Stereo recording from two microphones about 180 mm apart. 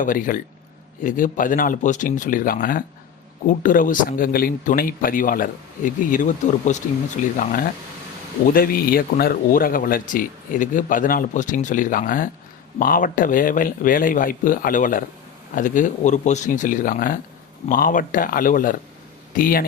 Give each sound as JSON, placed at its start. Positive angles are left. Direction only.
{"t": 0.0, "sound": "speech", "side_deg": 50}